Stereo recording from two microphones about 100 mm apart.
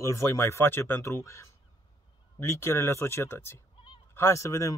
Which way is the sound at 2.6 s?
25° left (ahead or behind).